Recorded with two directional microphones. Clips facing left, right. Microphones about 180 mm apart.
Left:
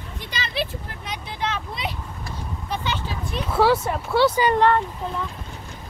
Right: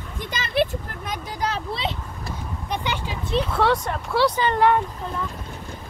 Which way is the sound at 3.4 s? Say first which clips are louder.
Left 3 dB; 5° left (ahead or behind).